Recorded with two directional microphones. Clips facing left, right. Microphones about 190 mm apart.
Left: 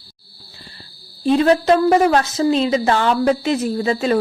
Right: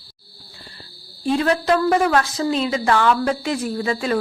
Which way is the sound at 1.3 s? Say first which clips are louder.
Left 5 dB; 20° left (ahead or behind).